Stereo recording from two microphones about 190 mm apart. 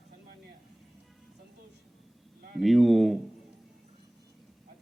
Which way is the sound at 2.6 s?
Centre (ahead or behind).